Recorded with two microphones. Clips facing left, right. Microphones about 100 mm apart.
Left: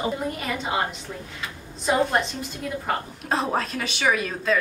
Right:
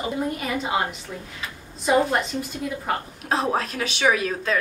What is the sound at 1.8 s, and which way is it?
A woman's voice, 5° right (ahead or behind).